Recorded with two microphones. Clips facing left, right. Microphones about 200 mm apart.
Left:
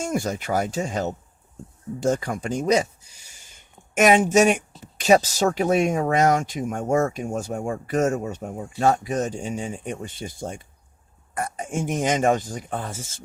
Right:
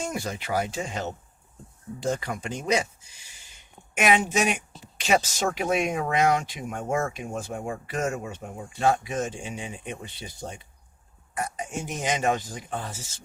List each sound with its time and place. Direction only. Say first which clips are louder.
0.0 s speech: left 6 dB; 45° left (ahead or behind)